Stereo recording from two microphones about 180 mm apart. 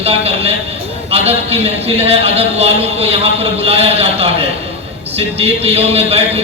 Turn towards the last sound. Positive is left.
turn(degrees=-35)  # may be behind; listen again after turning